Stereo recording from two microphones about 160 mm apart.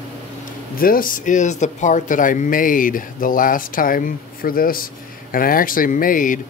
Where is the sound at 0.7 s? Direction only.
65° left (ahead or behind).